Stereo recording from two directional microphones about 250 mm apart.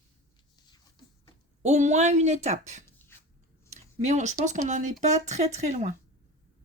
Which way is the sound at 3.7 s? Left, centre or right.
Right.